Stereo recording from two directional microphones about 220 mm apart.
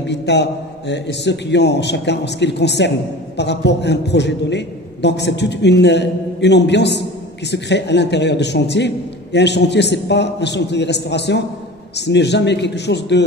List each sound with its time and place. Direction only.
0.0 s a man's voice: 50° left (ahead or behind)